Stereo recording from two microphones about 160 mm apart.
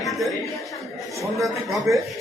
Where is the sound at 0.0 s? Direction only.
Centre (ahead or behind).